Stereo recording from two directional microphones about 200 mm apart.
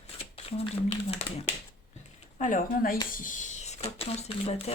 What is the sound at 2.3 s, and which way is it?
Speech, 40° left (ahead or behind).